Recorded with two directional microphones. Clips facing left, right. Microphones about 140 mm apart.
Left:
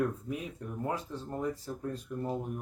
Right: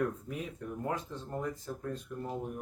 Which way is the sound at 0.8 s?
10° left (ahead or behind).